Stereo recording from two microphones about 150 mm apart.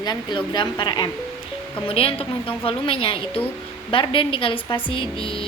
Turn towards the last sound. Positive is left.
turn(degrees=35)  # may be behind; listen again after turning